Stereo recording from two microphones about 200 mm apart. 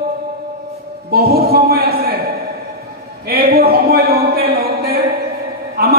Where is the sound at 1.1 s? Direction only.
50° right (ahead or behind).